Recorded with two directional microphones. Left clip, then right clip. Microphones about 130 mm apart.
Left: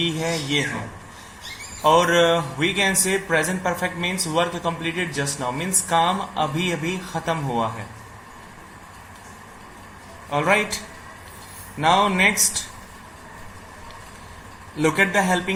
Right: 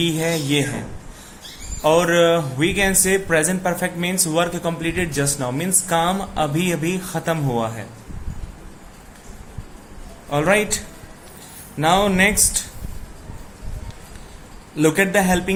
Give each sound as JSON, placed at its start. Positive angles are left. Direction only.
{"t": 0.0, "sound": "speech", "side_deg": -45}
{"t": 1.8, "sound": "speech", "side_deg": -35}
{"t": 10.2, "sound": "speech", "side_deg": -45}
{"t": 11.8, "sound": "speech", "side_deg": -45}
{"t": 14.8, "sound": "speech", "side_deg": -40}